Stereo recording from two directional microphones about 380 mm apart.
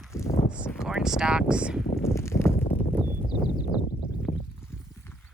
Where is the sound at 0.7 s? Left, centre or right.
Centre.